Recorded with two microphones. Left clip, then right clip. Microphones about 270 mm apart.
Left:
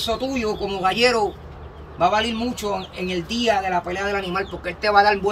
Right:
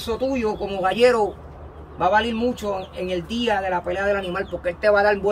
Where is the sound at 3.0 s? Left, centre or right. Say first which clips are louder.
Even; centre.